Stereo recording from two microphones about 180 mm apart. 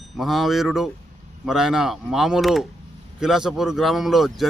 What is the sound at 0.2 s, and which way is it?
Speech, centre (ahead or behind).